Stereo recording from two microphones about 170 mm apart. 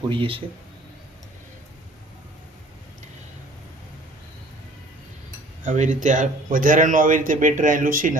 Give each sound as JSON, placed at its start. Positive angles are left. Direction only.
{"t": 0.1, "sound": "speech", "side_deg": -30}
{"t": 5.6, "sound": "speech", "side_deg": -45}